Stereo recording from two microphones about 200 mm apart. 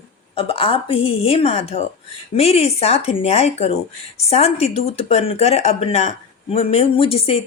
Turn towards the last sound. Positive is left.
turn(degrees=30)  # may be behind; listen again after turning